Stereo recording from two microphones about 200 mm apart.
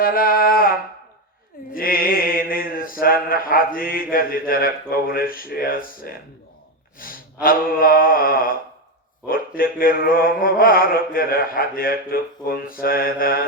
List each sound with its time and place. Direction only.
0.0 s a sound: 45° left (ahead or behind)
1.7 s mantra: 45° left (ahead or behind)
7.0 s speech: 45° left (ahead or behind)
7.4 s mantra: 45° left (ahead or behind)